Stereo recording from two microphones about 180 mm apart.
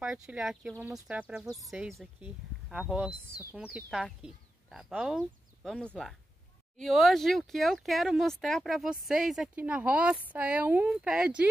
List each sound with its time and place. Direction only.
0.0 s speech: 5° right (ahead or behind)